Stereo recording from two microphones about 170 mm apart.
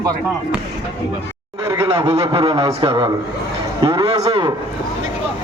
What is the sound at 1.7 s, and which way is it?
A man's voice, 30° right (ahead or behind).